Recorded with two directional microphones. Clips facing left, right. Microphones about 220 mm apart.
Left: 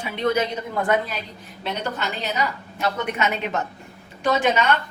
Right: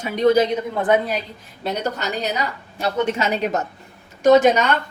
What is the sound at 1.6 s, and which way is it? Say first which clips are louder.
A woman's voice: right 3 dB; 40° right (ahead or behind).